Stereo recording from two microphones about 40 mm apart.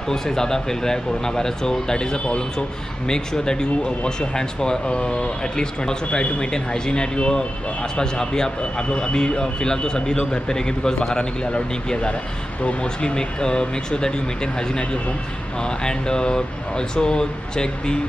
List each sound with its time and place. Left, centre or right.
0.1 s speech: centre
15.8 s speech: centre